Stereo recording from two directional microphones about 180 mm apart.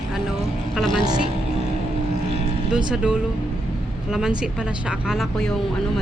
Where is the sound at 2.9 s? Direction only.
5° right (ahead or behind).